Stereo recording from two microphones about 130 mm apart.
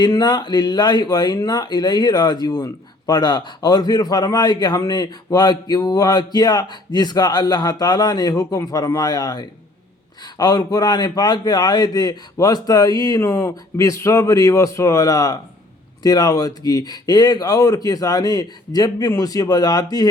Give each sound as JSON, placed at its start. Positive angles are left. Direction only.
{"t": 0.0, "sound": "a man's voice", "side_deg": 30}